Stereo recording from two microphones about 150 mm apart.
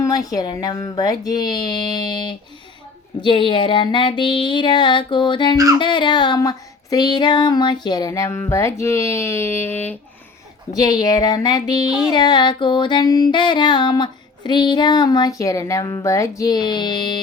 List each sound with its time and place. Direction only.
0.0 s music: 25° left (ahead or behind)
3.2 s a sound: 30° left (ahead or behind)
5.8 s music: 30° left (ahead or behind); by 10.0 s 15° left (ahead or behind)
10.7 s music: 25° left (ahead or behind)